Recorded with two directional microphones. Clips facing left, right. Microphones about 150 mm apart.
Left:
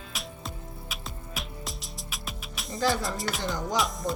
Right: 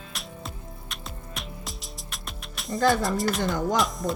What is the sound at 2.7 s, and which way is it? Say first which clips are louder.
Speech: right 5 dB; 50° right (ahead or behind).